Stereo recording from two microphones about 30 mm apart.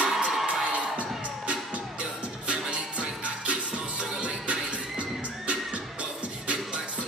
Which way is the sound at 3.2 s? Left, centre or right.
Right.